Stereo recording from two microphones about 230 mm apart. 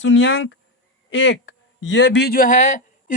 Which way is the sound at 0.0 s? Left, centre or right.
Left.